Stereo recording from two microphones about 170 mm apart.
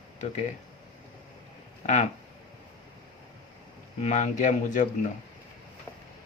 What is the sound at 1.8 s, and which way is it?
Speech, 45° left (ahead or behind).